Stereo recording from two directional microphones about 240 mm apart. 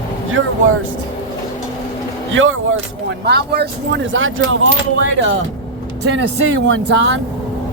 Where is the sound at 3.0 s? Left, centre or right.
Right.